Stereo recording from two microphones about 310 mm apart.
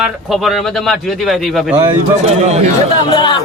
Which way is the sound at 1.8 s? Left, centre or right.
Centre.